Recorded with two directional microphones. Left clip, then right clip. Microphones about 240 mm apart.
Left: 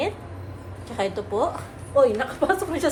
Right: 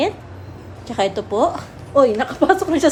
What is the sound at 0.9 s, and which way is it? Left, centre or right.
A woman's voice, right.